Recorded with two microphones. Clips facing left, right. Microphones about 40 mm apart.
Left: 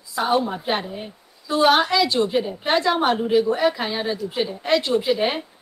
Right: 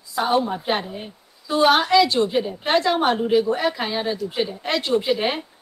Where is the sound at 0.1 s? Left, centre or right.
Centre.